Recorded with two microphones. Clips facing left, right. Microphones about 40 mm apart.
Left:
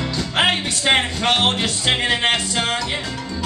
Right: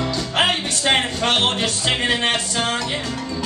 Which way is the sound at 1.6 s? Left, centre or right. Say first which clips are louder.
Left 1 dB; left.